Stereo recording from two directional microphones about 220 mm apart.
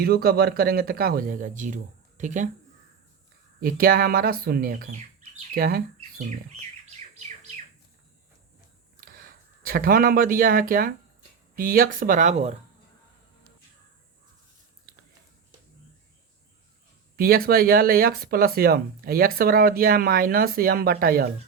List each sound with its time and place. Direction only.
0.0 s speech: 45° right (ahead or behind)
3.6 s speech: 40° right (ahead or behind)
7.1 s bird: 35° right (ahead or behind)
9.0 s speech: 40° right (ahead or behind)
17.2 s speech: 40° right (ahead or behind)